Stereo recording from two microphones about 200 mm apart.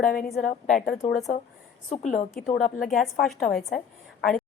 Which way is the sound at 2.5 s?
Centre (ahead or behind).